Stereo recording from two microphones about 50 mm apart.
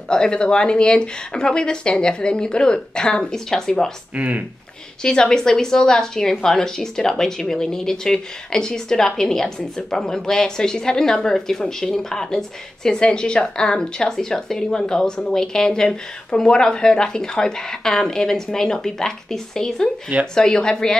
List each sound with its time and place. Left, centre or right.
0.1 s speech: centre
4.1 s speech: right
5.0 s speech: centre